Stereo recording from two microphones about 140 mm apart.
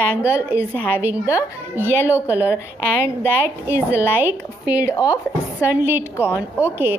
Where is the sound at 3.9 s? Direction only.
15° right (ahead or behind).